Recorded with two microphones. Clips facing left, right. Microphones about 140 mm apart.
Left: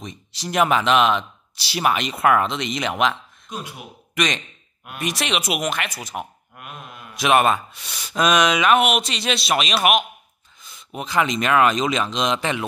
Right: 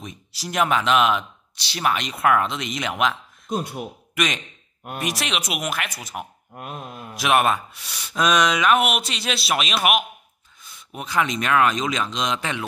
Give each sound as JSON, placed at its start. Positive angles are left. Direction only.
{"t": 0.0, "sound": "speech", "side_deg": -5}
{"t": 1.6, "sound": "speech", "side_deg": 10}
{"t": 3.4, "sound": "speech", "side_deg": -40}
{"t": 4.1, "sound": "speech", "side_deg": -5}
{"t": 6.5, "sound": "a sound", "side_deg": -35}
{"t": 7.2, "sound": "speech", "side_deg": 0}
{"t": 10.6, "sound": "a sound", "side_deg": 0}
{"t": 11.0, "sound": "speech", "side_deg": 0}